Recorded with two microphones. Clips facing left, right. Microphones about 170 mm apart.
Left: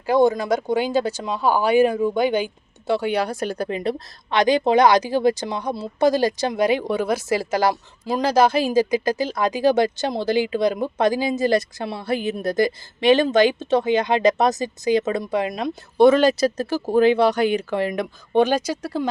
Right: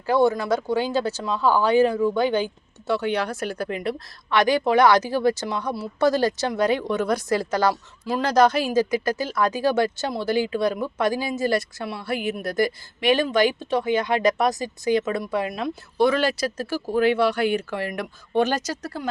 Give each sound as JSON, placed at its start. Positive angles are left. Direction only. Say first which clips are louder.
{"t": 0.0, "sound": "speech", "louder": "left 2 dB", "side_deg": 15}
{"t": 3.6, "sound": "speech", "louder": "left 3 dB", "side_deg": 25}